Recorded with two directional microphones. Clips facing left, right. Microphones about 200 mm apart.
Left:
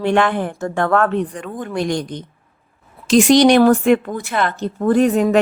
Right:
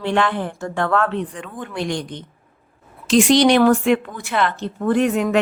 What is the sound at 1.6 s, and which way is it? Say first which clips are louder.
Speech: left 4 dB; 45° left (ahead or behind).